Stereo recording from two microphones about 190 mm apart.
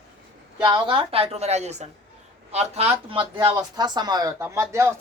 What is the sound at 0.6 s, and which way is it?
A woman's voice, 25° right (ahead or behind).